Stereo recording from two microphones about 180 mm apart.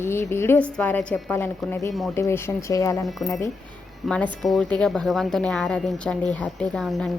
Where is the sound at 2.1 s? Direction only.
15° left (ahead or behind).